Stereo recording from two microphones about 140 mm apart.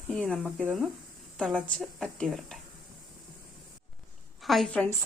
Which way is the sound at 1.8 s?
5° left (ahead or behind).